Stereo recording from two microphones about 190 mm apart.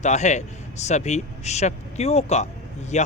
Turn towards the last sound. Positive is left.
turn(degrees=35)  # may be behind; listen again after turning